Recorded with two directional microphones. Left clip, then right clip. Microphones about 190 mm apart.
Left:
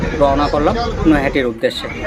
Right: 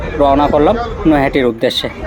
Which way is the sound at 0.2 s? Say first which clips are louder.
Right 4 dB; 25° right (ahead or behind).